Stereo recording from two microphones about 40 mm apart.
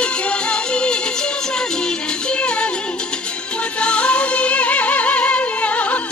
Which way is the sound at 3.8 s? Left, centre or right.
Left.